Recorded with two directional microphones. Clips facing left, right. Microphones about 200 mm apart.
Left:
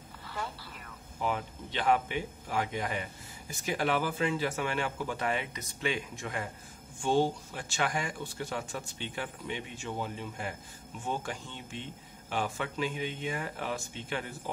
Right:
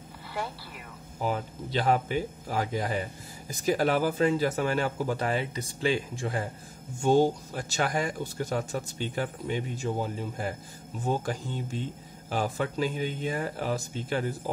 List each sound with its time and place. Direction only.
1.2 s speech: 35° right (ahead or behind)